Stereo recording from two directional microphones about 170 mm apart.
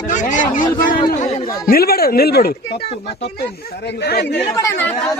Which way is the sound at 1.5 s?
60° left (ahead or behind).